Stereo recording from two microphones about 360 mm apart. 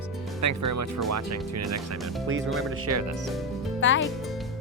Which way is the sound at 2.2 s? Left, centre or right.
Right.